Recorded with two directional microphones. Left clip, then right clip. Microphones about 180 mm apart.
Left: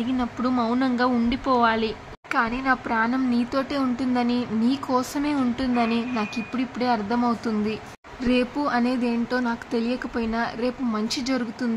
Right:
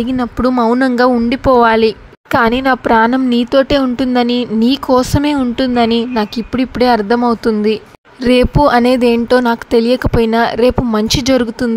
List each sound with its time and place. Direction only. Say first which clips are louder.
0.0 s speech: right 11 dB; 40° right (ahead or behind)